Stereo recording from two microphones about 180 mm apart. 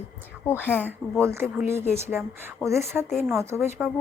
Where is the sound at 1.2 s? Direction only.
15° right (ahead or behind).